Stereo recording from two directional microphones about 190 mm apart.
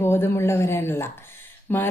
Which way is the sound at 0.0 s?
10° left (ahead or behind).